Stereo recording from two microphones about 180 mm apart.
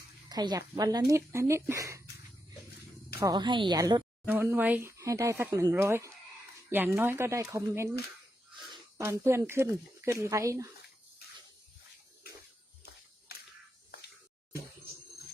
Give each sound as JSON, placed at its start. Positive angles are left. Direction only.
{"t": 0.3, "sound": "speech", "side_deg": -20}
{"t": 3.2, "sound": "speech", "side_deg": -20}
{"t": 4.3, "sound": "speech", "side_deg": -10}
{"t": 8.5, "sound": "a sound", "side_deg": -25}
{"t": 9.0, "sound": "speech", "side_deg": -15}
{"t": 13.3, "sound": "a sound", "side_deg": 60}